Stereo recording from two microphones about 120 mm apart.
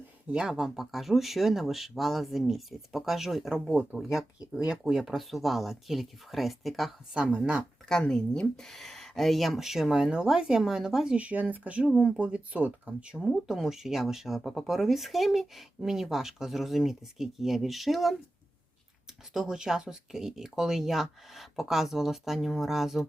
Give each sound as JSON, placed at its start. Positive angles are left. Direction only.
{"t": 0.3, "sound": "speech", "side_deg": -5}
{"t": 7.9, "sound": "speech", "side_deg": 5}
{"t": 19.3, "sound": "speech", "side_deg": -5}